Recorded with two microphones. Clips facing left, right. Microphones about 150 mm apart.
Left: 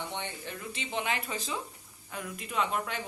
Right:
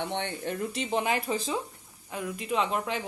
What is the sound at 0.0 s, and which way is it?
Speech, 60° right (ahead or behind).